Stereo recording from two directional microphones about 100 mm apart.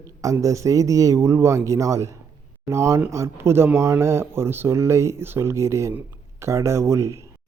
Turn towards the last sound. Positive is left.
turn(degrees=-30)  # may be behind; listen again after turning